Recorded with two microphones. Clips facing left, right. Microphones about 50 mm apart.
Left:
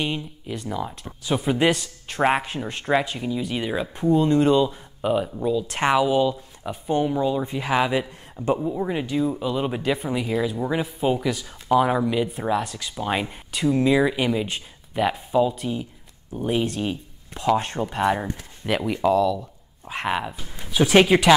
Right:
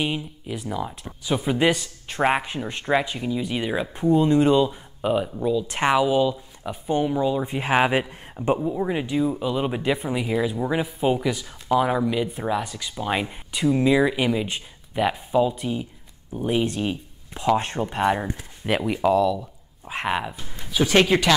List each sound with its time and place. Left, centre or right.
0.0 s speech: centre
7.4 s speech: right
8.5 s speech: centre
18.2 s speech: centre